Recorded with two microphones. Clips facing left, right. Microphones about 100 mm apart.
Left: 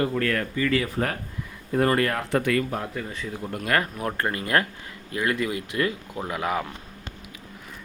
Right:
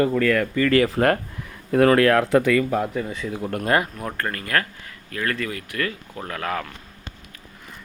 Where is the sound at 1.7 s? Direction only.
90° right.